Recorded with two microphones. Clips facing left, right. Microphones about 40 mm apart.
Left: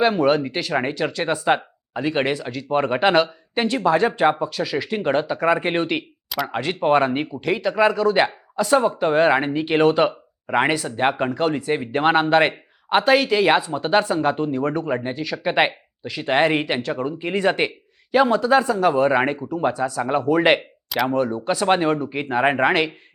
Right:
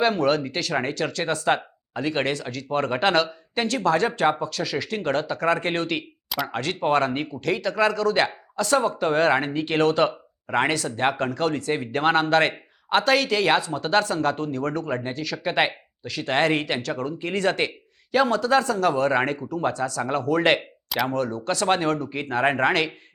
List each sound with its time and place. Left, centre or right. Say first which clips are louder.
0.0 s speech: left 3 dB; centre